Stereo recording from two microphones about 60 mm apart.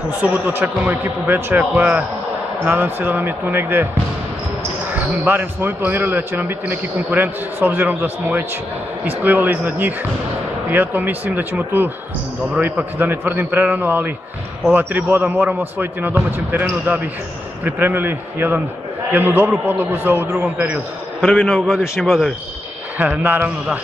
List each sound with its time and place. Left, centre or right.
0.2 s a man's voice: right
4.9 s a man's voice: right
13.0 s a man's voice: right
17.6 s a man's voice: right
21.2 s a man's voice: centre
21.5 s a man's voice: centre
22.9 s speech: right